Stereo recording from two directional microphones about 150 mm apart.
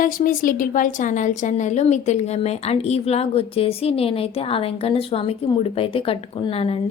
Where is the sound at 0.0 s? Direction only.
65° left (ahead or behind).